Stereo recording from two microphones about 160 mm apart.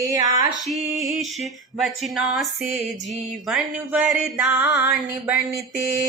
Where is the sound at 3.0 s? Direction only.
50° right (ahead or behind).